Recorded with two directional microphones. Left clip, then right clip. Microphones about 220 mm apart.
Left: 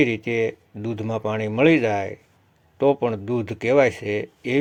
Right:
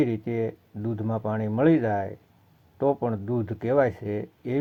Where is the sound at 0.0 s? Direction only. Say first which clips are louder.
Left 6 dB; 40° left (ahead or behind).